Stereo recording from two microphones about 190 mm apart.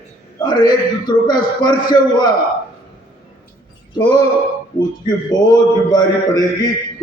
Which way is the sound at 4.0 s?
25° left (ahead or behind).